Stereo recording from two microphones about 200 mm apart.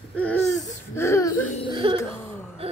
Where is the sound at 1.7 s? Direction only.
25° right (ahead or behind).